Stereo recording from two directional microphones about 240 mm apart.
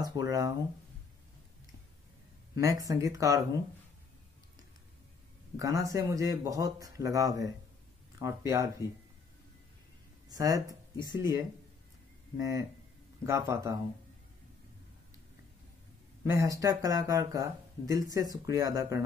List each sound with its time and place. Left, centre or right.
0.0 s speech: centre
2.6 s speech: centre
5.6 s speech: centre
10.3 s speech: centre
16.3 s speech: centre